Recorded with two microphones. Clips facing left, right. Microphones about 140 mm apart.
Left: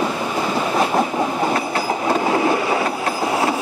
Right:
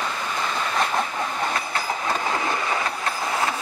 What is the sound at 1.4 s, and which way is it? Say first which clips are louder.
Train: left 7 dB; 35° left (ahead or behind).